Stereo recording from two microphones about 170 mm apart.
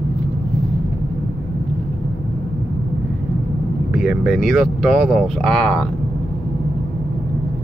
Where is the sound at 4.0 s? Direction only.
5° right (ahead or behind).